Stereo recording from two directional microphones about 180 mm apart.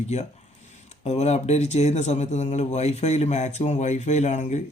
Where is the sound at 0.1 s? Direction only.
35° left (ahead or behind).